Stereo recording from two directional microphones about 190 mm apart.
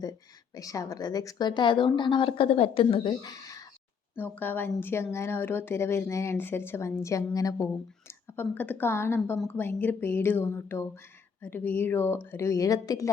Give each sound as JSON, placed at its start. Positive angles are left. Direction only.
{"t": 0.5, "sound": "speech", "side_deg": 20}